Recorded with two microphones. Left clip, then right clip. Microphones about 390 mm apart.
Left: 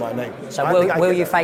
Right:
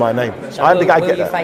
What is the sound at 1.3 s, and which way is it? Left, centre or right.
Speech, left.